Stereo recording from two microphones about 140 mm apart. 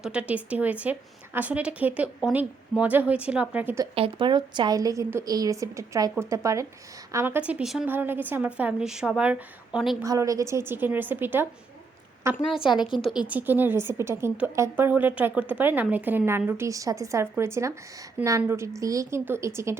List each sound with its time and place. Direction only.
0.0 s a woman's voice: 10° right (ahead or behind)
3.9 s a woman's voice: 40° right (ahead or behind); by 7.9 s 5° right (ahead or behind)
7.9 s a woman's voice: 15° right (ahead or behind)
10.0 s a woman's voice: 25° right (ahead or behind)
12.8 s a woman's voice: centre (ahead or behind)
13.2 s a woman's voice: 10° right (ahead or behind)